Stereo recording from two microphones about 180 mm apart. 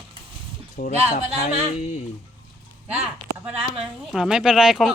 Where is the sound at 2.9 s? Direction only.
5° right (ahead or behind).